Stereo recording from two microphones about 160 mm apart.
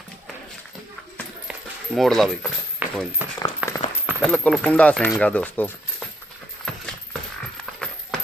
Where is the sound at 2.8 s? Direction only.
10° right (ahead or behind).